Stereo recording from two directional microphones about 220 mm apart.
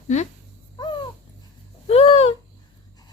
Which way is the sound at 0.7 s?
20° left (ahead or behind).